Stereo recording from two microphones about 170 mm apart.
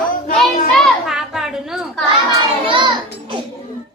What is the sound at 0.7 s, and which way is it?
Children playing, centre (ahead or behind).